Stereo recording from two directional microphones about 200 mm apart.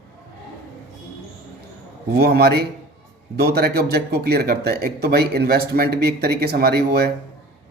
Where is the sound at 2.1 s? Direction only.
50° right (ahead or behind).